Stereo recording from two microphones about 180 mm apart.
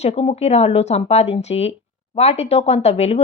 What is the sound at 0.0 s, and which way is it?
Speech, 35° left (ahead or behind).